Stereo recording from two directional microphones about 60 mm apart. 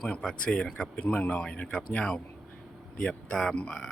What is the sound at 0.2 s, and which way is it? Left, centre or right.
Speech, centre.